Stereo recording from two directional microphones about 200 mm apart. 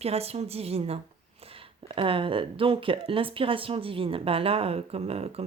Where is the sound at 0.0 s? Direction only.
30° right (ahead or behind).